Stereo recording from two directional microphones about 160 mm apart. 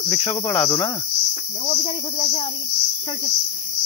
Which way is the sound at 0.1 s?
15° left (ahead or behind).